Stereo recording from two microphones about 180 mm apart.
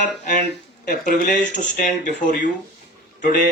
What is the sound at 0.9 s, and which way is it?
Speech, 50° left (ahead or behind).